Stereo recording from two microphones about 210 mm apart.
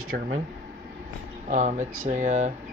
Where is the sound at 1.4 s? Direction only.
35° right (ahead or behind).